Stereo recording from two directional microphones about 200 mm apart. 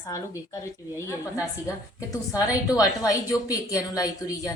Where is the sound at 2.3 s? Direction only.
15° left (ahead or behind).